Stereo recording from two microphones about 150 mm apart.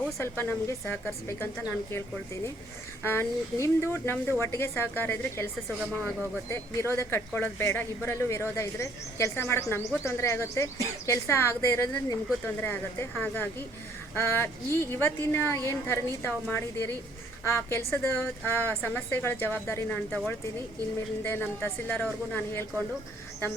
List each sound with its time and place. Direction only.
0.2 s speech: 15° left (ahead or behind)
6.5 s speech: 15° left (ahead or behind)
20.1 s speech: 5° left (ahead or behind)
21.2 s speech: 15° left (ahead or behind)